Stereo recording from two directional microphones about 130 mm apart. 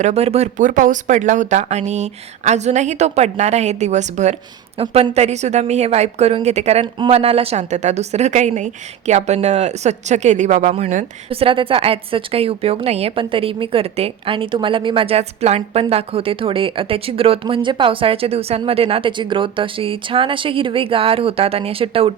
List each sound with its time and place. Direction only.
0.0 s speech: 55° right (ahead or behind)
4.8 s speech: 50° right (ahead or behind); by 11.0 s 65° right (ahead or behind)
11.3 s a woman's voice: 45° right (ahead or behind)